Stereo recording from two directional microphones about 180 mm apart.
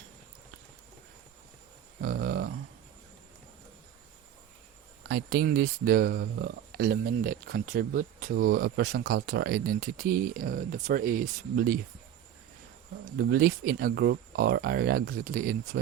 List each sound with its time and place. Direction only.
2.0 s a sound: 55° right (ahead or behind)
5.0 s speech: 65° right (ahead or behind)
13.1 s speech: 55° right (ahead or behind)